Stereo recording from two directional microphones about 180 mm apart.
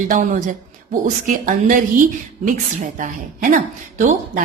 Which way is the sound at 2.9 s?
45° right (ahead or behind).